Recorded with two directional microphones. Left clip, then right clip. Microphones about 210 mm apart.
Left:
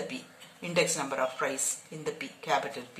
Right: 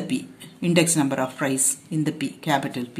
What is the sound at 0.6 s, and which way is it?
Speech, 45° right (ahead or behind).